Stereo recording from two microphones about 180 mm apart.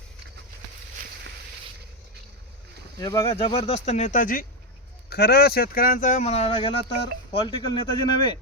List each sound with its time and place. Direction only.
3.0 s speech: 20° left (ahead or behind); by 4.4 s 50° left (ahead or behind)
5.0 s speech: 60° left (ahead or behind); by 8.4 s 25° left (ahead or behind)